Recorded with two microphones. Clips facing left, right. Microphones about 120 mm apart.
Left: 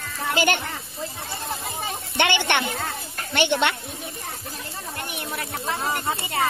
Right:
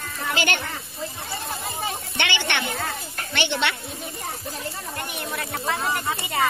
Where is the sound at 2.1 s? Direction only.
50° left (ahead or behind).